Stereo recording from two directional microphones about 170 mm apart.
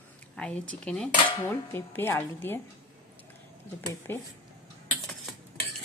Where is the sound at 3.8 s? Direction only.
20° left (ahead or behind).